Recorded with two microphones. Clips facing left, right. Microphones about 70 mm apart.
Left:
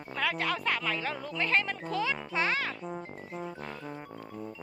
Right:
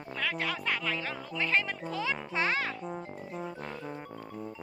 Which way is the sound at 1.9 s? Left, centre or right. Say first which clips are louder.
Left 2 dB; right.